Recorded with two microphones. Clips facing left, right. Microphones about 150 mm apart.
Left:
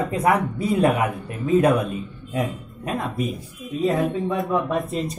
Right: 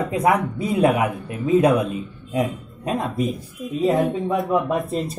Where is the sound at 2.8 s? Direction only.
20° right (ahead or behind).